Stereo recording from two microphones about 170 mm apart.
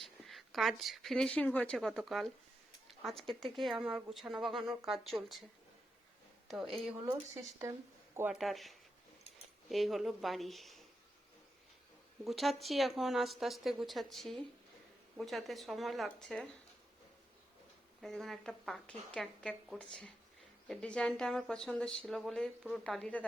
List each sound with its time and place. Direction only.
0.0 s speech: centre (ahead or behind)
6.5 s speech: centre (ahead or behind)
7.6 s a woman's voice: 15° right (ahead or behind)
8.3 s speech: centre (ahead or behind)
12.2 s speech: centre (ahead or behind)
18.0 s speech: centre (ahead or behind)